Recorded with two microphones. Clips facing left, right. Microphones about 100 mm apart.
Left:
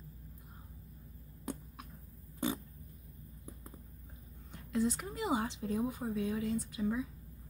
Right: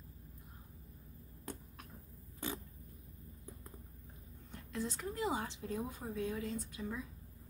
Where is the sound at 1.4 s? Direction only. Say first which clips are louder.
Left 6 dB; 15° left (ahead or behind).